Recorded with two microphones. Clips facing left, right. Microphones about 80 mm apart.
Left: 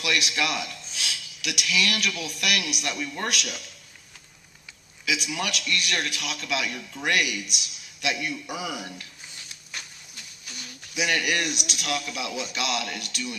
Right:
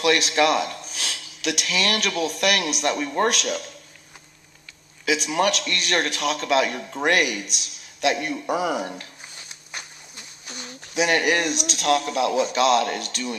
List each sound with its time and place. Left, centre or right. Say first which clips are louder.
0.0 s a man's voice: right 8 dB; right
5.0 s a man's voice: right 8 dB; right
9.5 s speech: right 2 dB; right